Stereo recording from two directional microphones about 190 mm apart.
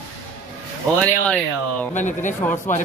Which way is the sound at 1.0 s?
5° left (ahead or behind).